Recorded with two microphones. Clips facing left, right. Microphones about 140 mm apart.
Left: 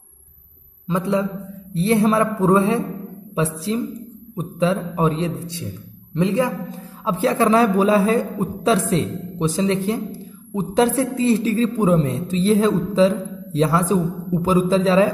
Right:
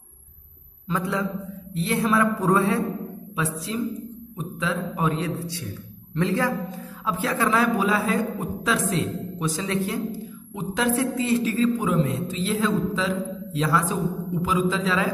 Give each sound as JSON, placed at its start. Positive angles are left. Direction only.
{"t": 0.8, "sound": "speech", "side_deg": 20}
{"t": 1.7, "sound": "a man's voice", "side_deg": 35}